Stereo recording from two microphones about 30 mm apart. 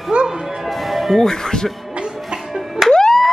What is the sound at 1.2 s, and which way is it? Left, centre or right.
Speech, centre.